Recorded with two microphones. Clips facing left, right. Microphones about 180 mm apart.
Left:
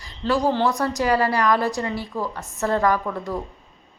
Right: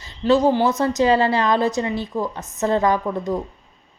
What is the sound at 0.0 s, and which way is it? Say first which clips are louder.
A woman's voice: right 5 dB; 20° right (ahead or behind).